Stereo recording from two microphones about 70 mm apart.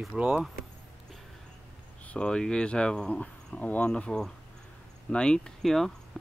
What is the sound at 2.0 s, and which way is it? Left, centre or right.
Speech, centre.